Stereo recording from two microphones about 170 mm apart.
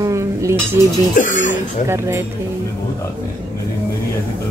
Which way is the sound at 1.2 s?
50° left (ahead or behind).